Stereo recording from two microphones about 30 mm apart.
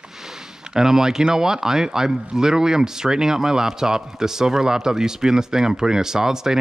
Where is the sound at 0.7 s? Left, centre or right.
Centre.